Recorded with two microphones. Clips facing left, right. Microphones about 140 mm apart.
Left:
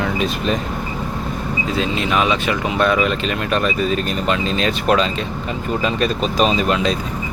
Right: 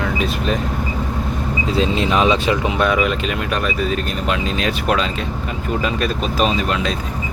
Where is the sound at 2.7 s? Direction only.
10° right (ahead or behind).